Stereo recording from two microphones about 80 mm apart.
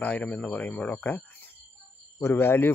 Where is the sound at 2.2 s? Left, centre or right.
Left.